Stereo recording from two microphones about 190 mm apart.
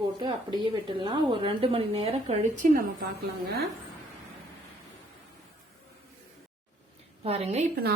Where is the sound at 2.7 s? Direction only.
50° right (ahead or behind).